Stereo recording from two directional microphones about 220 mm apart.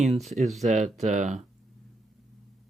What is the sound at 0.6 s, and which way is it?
Speech, 35° right (ahead or behind).